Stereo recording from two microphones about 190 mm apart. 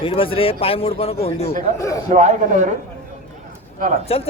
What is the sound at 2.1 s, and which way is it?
Speech, 40° right (ahead or behind).